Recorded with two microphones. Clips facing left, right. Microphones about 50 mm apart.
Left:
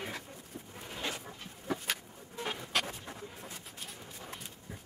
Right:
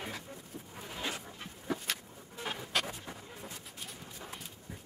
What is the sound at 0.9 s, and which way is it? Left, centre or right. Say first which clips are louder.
Dog: even; centre.